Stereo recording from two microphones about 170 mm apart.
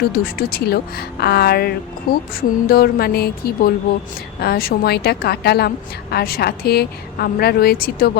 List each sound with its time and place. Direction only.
0.1 s a woman's voice: 60° left (ahead or behind)